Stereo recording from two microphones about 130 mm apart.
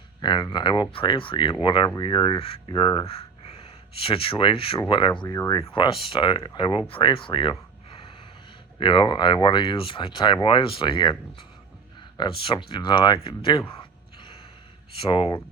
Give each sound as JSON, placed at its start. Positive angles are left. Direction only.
{"t": 0.2, "sound": "speech", "side_deg": 35}
{"t": 4.0, "sound": "speech", "side_deg": 45}
{"t": 5.3, "sound": "speech", "side_deg": 25}
{"t": 5.5, "sound": "speech", "side_deg": 40}
{"t": 8.8, "sound": "speech", "side_deg": 35}
{"t": 12.1, "sound": "speech", "side_deg": 40}
{"t": 14.9, "sound": "speech", "side_deg": 40}